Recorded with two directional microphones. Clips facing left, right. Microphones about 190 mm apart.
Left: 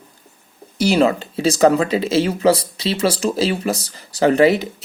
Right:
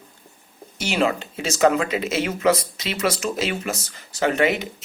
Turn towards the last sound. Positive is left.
turn(degrees=35)  # may be behind; listen again after turning